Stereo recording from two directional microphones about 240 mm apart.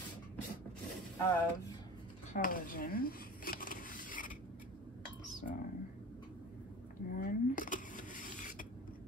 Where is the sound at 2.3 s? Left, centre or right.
Left.